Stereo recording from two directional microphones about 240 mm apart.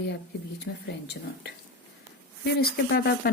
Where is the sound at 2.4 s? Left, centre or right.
Left.